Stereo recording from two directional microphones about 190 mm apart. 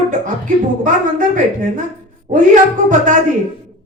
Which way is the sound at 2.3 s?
40° right (ahead or behind).